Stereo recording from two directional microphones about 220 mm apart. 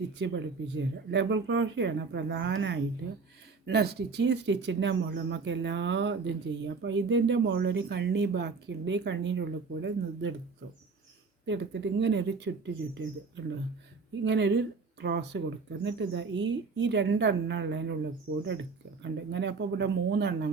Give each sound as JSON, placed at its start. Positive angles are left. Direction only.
{"t": 0.2, "sound": "speech", "side_deg": -55}
{"t": 11.4, "sound": "speech", "side_deg": -50}
{"t": 19.0, "sound": "speech", "side_deg": -50}